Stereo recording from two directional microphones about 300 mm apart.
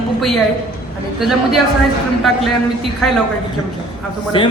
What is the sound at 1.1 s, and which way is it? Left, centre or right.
Speech, centre.